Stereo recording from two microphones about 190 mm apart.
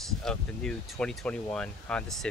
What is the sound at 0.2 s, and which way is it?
Speech, 5° left (ahead or behind).